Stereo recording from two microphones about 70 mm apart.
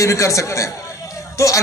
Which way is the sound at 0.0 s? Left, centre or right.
Left.